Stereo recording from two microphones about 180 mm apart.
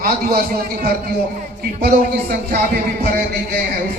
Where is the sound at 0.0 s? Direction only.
60° right (ahead or behind).